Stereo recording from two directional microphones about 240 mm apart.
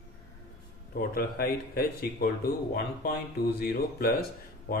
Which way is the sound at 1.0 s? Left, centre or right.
Left.